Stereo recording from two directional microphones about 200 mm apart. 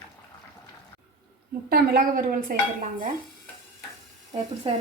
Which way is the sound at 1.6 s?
50° right (ahead or behind).